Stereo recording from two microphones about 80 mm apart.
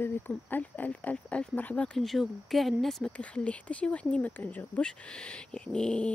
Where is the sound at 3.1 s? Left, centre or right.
Centre.